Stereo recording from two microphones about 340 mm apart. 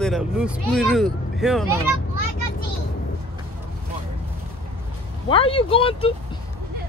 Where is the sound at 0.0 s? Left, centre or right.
Centre.